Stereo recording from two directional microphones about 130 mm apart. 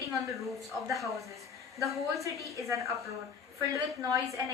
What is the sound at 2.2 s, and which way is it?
A woman's voice, 25° right (ahead or behind).